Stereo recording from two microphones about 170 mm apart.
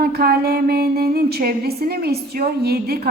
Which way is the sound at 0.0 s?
65° right (ahead or behind).